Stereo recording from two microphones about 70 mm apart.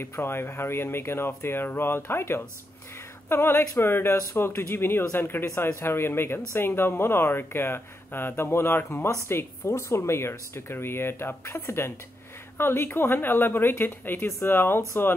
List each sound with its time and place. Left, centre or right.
0.0 s speech: left